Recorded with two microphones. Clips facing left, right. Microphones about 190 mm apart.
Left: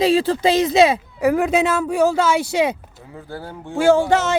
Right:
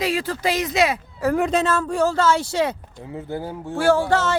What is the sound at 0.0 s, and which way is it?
Speech, 25° left (ahead or behind).